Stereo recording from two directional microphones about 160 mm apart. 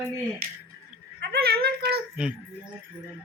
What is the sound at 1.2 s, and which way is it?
Speech, 90° right.